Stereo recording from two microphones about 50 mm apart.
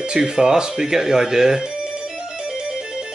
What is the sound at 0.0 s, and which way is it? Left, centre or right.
Music, centre.